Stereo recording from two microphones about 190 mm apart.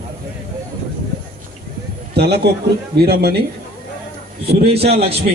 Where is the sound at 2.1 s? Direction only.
60° right (ahead or behind).